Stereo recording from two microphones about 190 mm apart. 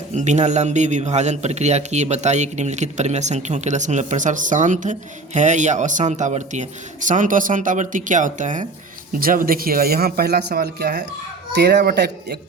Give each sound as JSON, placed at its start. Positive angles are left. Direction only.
{"t": 0.1, "sound": "a man's voice", "side_deg": -40}